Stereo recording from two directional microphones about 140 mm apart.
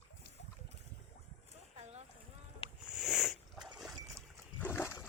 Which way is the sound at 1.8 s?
50° right (ahead or behind).